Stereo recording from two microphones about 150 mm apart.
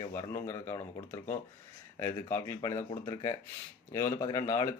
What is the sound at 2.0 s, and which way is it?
Speech, 20° left (ahead or behind).